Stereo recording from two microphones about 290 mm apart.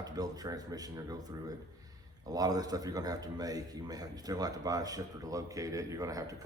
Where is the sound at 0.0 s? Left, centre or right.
Centre.